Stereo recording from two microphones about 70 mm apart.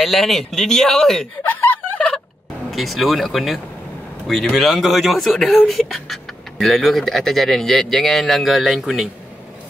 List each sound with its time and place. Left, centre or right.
0.0 s speech: centre
2.0 s fowl: centre
2.7 s speech: centre